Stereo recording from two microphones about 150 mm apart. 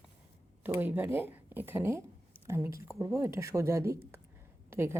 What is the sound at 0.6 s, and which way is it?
A woman's voice, 10° right (ahead or behind).